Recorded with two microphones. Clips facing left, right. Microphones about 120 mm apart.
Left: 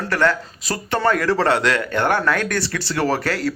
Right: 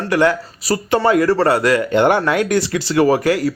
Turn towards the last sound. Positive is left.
turn(degrees=-15)  # may be behind; listen again after turning